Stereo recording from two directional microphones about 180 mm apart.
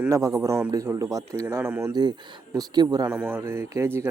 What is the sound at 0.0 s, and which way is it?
A man's voice, 15° right (ahead or behind).